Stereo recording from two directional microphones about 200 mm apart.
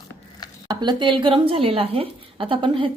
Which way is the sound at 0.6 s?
25° right (ahead or behind).